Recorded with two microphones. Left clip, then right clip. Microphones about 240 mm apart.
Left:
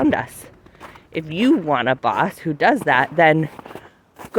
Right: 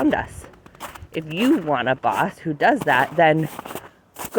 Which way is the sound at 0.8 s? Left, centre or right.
Right.